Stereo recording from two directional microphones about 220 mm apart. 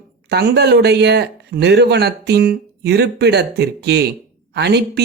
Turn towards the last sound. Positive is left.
turn(degrees=-50)  # may be behind; listen again after turning